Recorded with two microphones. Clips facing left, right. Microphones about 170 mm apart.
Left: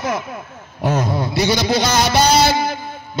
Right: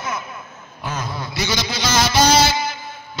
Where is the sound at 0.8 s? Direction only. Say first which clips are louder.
Left 9 dB; 70° left (ahead or behind).